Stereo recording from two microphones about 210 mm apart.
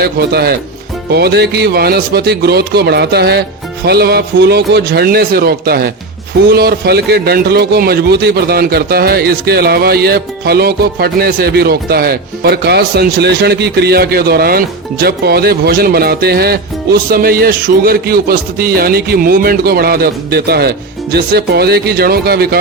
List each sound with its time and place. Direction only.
0.0 s a man's voice: 50° right (ahead or behind)